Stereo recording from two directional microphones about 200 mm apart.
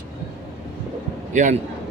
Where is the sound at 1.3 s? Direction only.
40° right (ahead or behind).